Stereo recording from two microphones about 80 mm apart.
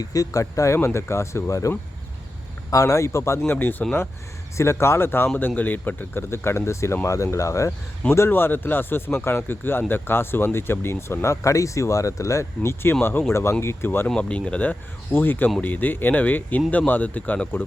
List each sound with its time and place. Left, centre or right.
0.0 s speech: left
3.4 s speech: left
4.5 s speech: left
8.3 s speech: left
14.2 s speech: centre